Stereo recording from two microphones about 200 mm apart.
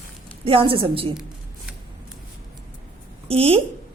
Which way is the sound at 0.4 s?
25° right (ahead or behind).